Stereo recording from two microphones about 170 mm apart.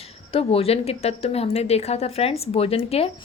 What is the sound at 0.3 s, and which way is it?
A woman's voice, 35° left (ahead or behind).